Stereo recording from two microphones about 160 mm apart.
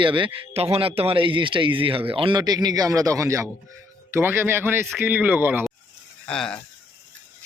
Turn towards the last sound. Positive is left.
turn(degrees=5)  # may be behind; listen again after turning